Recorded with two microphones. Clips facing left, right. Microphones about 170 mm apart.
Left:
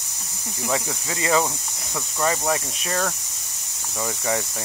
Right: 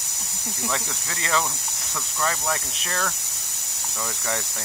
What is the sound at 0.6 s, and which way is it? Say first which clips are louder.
Speech: left 5 dB; 15° left (ahead or behind).